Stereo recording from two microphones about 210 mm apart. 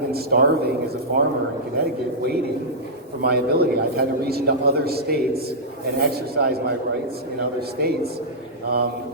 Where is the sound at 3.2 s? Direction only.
50° right (ahead or behind).